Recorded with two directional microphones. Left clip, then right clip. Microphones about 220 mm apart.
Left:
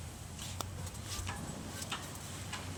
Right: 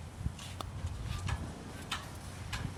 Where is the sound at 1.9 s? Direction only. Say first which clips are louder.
Right 3 dB; 40° right (ahead or behind).